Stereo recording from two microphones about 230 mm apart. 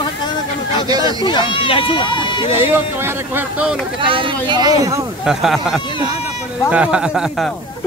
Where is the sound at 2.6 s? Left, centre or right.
Centre.